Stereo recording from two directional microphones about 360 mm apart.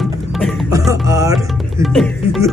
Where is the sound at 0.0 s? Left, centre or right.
Centre.